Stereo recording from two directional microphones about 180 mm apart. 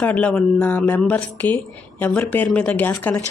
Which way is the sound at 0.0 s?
5° left (ahead or behind).